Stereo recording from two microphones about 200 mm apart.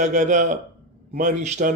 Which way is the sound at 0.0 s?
35° right (ahead or behind).